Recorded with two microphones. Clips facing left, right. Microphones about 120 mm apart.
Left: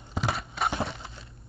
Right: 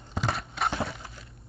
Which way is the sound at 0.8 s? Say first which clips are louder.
Even; 25° left (ahead or behind).